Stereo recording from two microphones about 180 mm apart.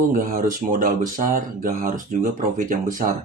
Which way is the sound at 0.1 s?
50° right (ahead or behind).